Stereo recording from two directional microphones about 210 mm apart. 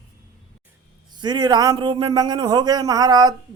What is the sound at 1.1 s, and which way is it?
A man's voice, 20° right (ahead or behind).